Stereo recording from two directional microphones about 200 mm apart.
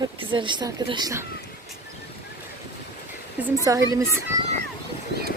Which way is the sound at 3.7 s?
15° right (ahead or behind).